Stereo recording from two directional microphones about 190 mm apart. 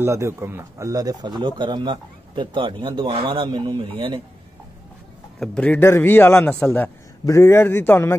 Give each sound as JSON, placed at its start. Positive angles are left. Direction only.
{"t": 0.0, "sound": "speech", "side_deg": -15}
{"t": 5.4, "sound": "a man's voice", "side_deg": 5}